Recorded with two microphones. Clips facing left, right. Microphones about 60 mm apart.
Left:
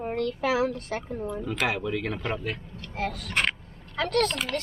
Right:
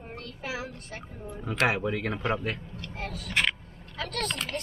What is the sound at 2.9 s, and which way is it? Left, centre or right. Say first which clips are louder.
Speech: left 2 dB; left.